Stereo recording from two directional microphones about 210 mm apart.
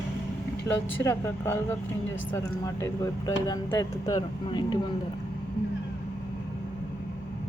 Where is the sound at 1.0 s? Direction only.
15° left (ahead or behind).